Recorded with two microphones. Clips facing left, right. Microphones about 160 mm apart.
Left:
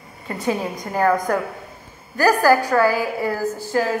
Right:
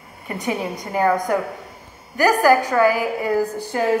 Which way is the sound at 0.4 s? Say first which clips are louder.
Left 2 dB; 20° right (ahead or behind).